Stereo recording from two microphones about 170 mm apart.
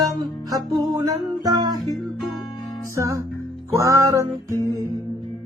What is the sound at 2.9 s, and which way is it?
Music, 20° right (ahead or behind).